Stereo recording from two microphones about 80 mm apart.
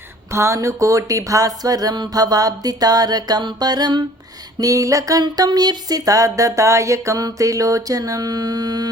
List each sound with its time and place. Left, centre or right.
0.3 s music: right
4.5 s music: right
5.5 s music: right